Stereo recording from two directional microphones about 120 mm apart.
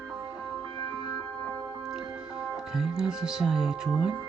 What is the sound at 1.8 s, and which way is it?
Speech, 5° right (ahead or behind).